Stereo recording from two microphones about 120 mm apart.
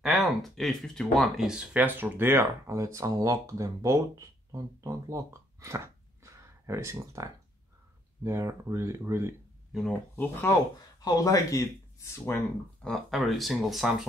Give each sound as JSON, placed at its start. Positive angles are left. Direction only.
{"t": 0.0, "sound": "speech", "side_deg": 0}
{"t": 9.7, "sound": "speech", "side_deg": 0}
{"t": 10.1, "sound": "speech", "side_deg": 25}
{"t": 12.8, "sound": "speech", "side_deg": 0}